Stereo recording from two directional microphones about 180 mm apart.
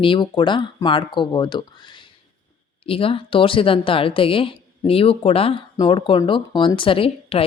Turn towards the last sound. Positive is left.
turn(degrees=30)  # may be behind; listen again after turning